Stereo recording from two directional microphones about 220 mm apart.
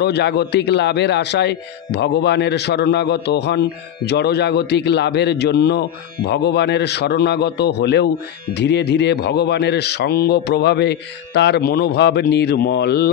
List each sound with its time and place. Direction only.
0.0 s a man's voice: 50° left (ahead or behind)